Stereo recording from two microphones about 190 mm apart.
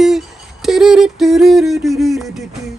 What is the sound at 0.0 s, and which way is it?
Music, centre (ahead or behind).